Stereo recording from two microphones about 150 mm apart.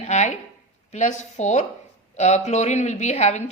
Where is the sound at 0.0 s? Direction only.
50° left (ahead or behind).